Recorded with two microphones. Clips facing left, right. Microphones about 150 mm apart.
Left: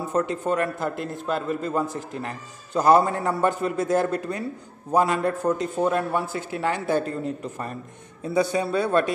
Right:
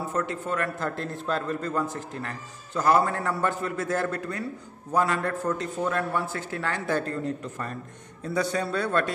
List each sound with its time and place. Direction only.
0.1 s speech: 20° left (ahead or behind)